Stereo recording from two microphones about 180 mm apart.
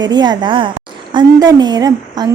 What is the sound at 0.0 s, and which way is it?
A woman's voice, 25° right (ahead or behind).